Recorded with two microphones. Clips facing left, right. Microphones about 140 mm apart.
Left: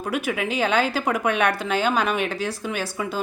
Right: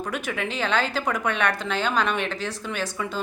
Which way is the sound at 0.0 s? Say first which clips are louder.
Left 3 dB; 10° left (ahead or behind).